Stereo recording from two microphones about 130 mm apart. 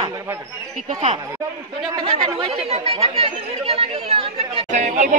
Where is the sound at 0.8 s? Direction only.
60° right (ahead or behind).